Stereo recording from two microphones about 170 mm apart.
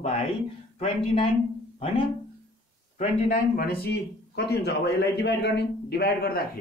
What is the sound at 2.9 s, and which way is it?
A man's voice, 55° left (ahead or behind).